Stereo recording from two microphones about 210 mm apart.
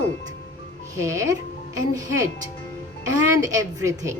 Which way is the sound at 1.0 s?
15° right (ahead or behind).